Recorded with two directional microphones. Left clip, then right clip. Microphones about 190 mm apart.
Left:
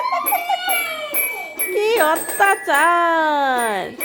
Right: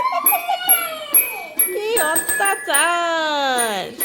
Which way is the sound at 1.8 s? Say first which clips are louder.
Left 4 dB; 30° left (ahead or behind).